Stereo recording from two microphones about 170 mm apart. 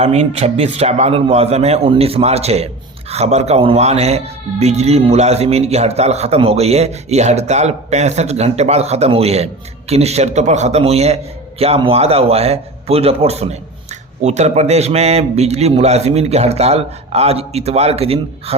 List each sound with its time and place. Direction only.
0.0 s a man's voice: 40° right (ahead or behind)